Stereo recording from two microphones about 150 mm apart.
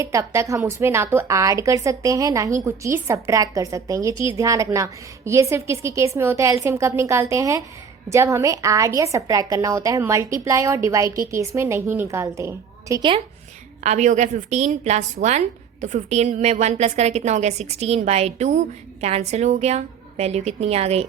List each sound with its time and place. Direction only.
0.0 s a woman's voice: 20° right (ahead or behind)
13.0 s a woman's voice: 35° right (ahead or behind)
13.8 s a woman's voice: 50° right (ahead or behind)